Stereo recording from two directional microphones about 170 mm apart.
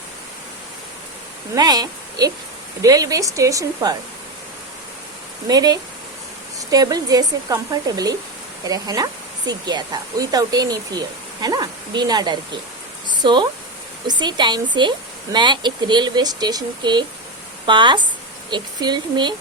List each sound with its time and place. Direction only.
1.5 s a woman's voice: 25° right (ahead or behind)
5.5 s a woman's voice: 20° right (ahead or behind)
13.1 s a sound: 30° right (ahead or behind)
14.1 s a woman's voice: 25° right (ahead or behind)